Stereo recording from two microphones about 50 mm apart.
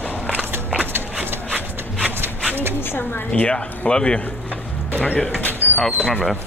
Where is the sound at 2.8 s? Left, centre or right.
Left.